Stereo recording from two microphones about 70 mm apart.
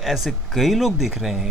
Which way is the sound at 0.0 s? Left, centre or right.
Centre.